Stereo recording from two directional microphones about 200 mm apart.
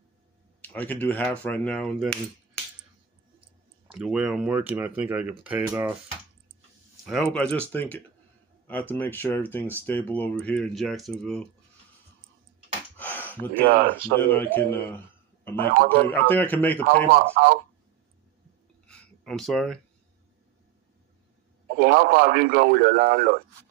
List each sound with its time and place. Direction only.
0.6 s speech: 10° left (ahead or behind)
3.8 s speech: 5° right (ahead or behind)
7.1 s speech: 5° left (ahead or behind)
12.9 s a sound: 10° left (ahead or behind)
13.5 s speech: 45° right (ahead or behind)
14.3 s speech: 10° left (ahead or behind)
16.3 s speech: 10° left (ahead or behind)
16.8 s speech: 45° right (ahead or behind)
18.9 s a sound: 5° left (ahead or behind)
21.7 s speech: 45° right (ahead or behind)